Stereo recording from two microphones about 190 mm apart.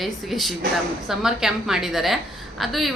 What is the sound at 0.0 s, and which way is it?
A woman's voice, centre (ahead or behind).